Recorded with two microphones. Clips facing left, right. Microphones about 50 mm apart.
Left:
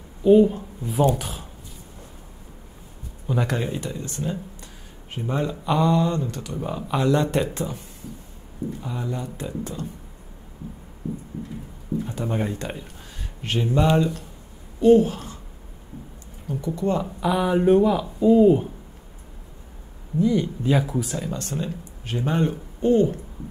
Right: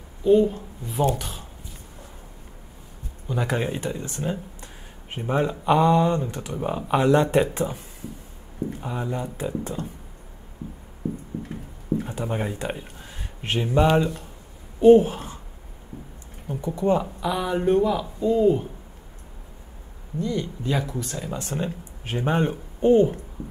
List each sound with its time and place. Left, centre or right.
0.2 s speech: centre
3.3 s speech: centre
3.6 s speech: right
8.8 s speech: centre
10.6 s speech: right
12.2 s speech: centre
13.4 s speech: right
16.4 s speech: right
17.2 s speech: centre
20.2 s speech: centre
21.5 s speech: right